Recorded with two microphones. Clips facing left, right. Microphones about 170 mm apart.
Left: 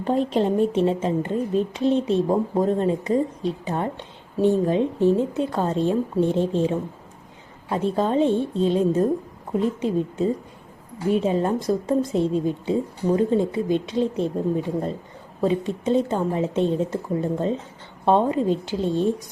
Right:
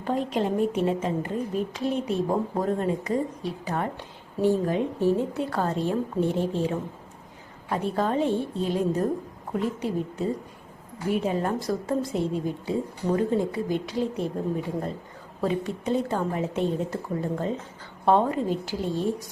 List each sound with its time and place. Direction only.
0.0 s speech: 30° left (ahead or behind)